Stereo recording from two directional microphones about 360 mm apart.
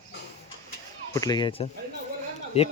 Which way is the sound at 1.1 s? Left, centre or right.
Centre.